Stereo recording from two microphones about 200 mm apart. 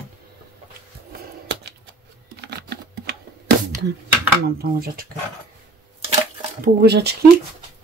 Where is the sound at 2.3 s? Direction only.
55° right (ahead or behind).